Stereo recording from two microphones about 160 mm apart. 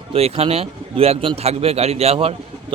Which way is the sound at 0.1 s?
40° right (ahead or behind).